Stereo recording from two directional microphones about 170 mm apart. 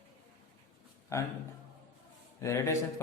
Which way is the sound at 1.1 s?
15° left (ahead or behind).